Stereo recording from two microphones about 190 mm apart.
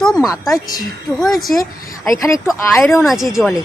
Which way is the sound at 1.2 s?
Centre (ahead or behind).